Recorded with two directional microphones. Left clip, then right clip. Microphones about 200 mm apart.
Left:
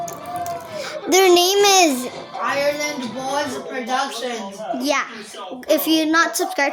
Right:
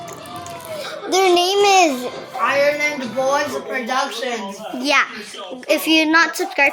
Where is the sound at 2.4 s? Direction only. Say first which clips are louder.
Right 4 dB; 10° left (ahead or behind).